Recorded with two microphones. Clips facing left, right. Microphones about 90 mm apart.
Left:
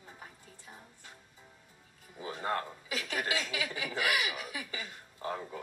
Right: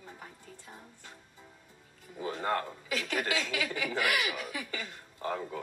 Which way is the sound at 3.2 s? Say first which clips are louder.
Right 2 dB; 50° right (ahead or behind).